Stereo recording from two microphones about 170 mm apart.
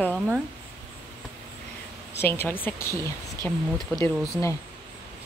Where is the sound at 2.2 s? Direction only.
10° left (ahead or behind).